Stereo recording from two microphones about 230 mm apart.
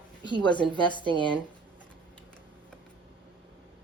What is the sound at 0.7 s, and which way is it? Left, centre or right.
Speech, centre.